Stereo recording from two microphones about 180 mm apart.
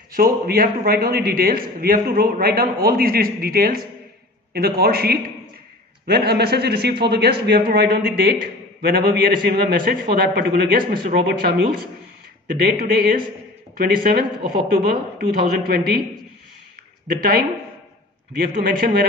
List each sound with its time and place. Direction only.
0.1 s a man's voice: 55° right (ahead or behind)
18.4 s a man's voice: 55° right (ahead or behind)